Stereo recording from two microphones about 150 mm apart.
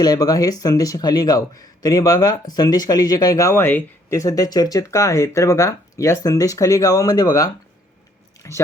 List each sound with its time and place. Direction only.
0.0 s a man's voice: 25° left (ahead or behind)